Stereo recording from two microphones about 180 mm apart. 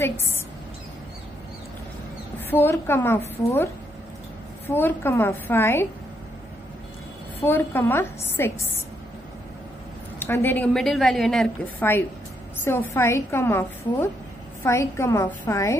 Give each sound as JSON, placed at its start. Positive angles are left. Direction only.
{"t": 0.0, "sound": "a woman's voice", "side_deg": 15}
{"t": 2.5, "sound": "a woman's voice", "side_deg": 10}
{"t": 4.6, "sound": "a woman's voice", "side_deg": 10}
{"t": 7.4, "sound": "a woman's voice", "side_deg": 10}
{"t": 10.1, "sound": "a woman's voice", "side_deg": 15}